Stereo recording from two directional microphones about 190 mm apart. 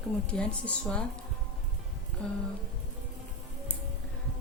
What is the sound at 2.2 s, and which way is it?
Speech, 5° left (ahead or behind).